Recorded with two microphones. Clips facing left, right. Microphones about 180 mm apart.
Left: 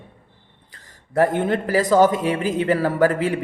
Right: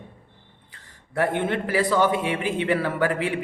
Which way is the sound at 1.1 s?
40° left (ahead or behind).